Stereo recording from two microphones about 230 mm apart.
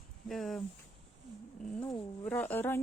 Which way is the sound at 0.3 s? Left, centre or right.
Centre.